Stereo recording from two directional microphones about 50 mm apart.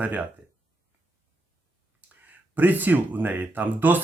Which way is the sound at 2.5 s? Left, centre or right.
Right.